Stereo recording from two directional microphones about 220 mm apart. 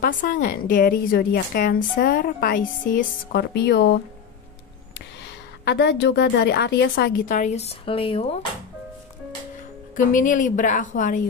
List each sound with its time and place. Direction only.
0.0 s a woman's voice: 40° left (ahead or behind)
9.9 s a woman's voice: 35° left (ahead or behind)